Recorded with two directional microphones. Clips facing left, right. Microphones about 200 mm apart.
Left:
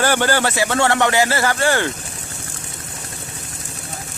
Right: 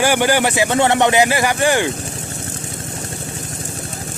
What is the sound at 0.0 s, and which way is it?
A man's voice, 15° right (ahead or behind).